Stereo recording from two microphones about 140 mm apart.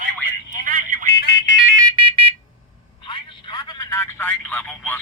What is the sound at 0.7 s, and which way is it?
Telephone, 90° right.